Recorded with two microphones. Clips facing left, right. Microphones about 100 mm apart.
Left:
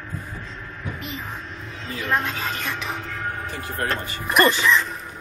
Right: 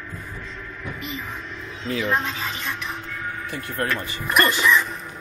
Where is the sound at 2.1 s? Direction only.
50° left (ahead or behind).